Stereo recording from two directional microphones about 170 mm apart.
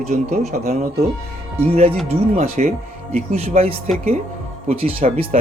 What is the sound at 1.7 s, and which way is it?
Speech, 35° right (ahead or behind).